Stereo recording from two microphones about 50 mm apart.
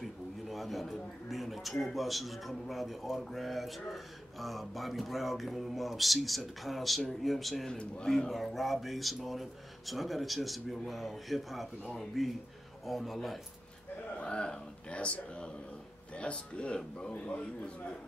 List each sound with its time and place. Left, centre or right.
0.0 s a man's voice: centre
7.7 s speech: centre
8.3 s speech: centre
14.2 s a sound: centre
16.1 s speech: left